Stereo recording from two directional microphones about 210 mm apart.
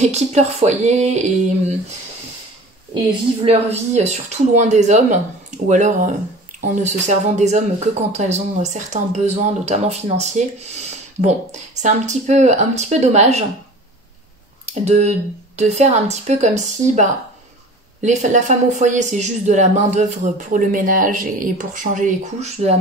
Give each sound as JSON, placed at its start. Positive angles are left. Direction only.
{"t": 0.0, "sound": "speech", "side_deg": -30}
{"t": 3.4, "sound": "speech", "side_deg": -30}
{"t": 14.7, "sound": "speech", "side_deg": -30}